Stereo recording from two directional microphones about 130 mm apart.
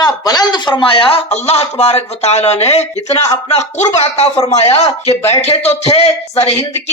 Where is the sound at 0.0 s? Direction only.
30° left (ahead or behind).